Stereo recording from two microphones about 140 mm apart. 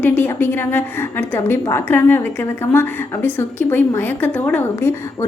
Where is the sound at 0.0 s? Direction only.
15° left (ahead or behind).